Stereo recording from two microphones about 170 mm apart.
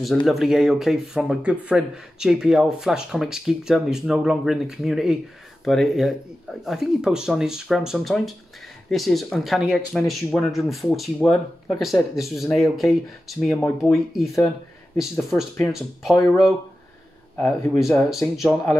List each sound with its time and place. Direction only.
0.0 s speech: centre (ahead or behind)